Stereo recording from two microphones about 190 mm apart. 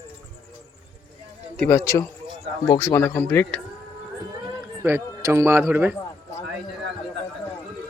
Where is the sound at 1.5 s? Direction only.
10° left (ahead or behind).